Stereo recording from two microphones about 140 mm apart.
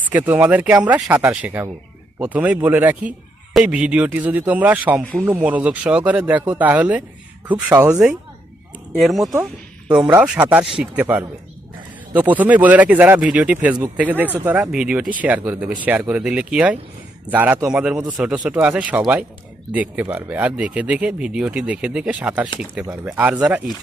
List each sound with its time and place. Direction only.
0.1 s a man's voice: 15° right (ahead or behind)
9.0 s a man's voice: centre (ahead or behind)